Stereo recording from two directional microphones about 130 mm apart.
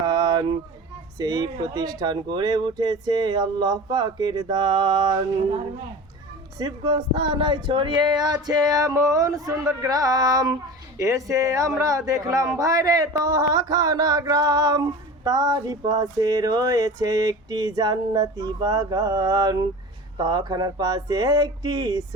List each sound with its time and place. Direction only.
0.0 s a sound: 30° right (ahead or behind)
1.2 s speech: 30° right (ahead or behind)
6.6 s a man's voice: 30° right (ahead or behind)